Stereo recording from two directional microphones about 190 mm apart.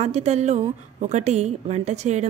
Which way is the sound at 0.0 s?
35° right (ahead or behind).